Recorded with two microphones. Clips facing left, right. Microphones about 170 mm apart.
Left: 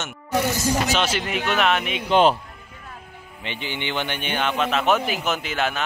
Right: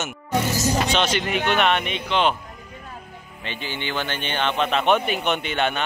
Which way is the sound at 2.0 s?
40° left (ahead or behind).